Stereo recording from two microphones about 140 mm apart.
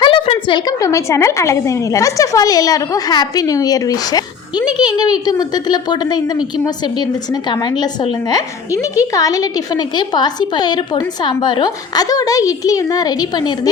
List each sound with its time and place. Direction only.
0.0 s a sound: 40° left (ahead or behind)
0.8 s a woman's voice: 20° left (ahead or behind)
7.5 s a woman's voice: 30° left (ahead or behind)